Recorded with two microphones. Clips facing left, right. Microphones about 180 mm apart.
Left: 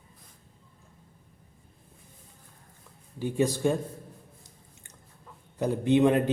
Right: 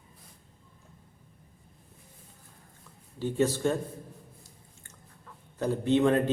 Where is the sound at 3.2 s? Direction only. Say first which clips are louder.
Left 1 dB; 15° left (ahead or behind).